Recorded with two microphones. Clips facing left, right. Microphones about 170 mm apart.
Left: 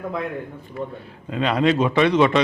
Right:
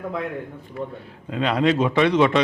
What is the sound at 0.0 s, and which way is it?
A man's voice, 20° left (ahead or behind).